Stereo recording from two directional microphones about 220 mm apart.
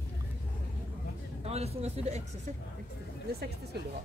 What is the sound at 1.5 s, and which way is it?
Speech, 30° right (ahead or behind).